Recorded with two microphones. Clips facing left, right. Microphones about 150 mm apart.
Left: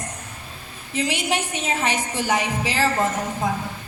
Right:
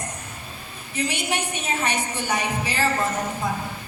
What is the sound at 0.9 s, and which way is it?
A woman's voice, 90° left.